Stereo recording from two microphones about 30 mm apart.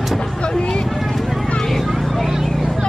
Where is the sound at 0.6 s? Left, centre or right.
Left.